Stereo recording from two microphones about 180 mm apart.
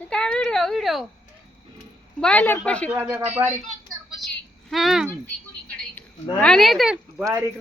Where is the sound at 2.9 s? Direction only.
10° right (ahead or behind).